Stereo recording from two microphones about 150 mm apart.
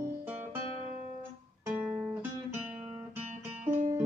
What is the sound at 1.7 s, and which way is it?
Guitar, 10° right (ahead or behind).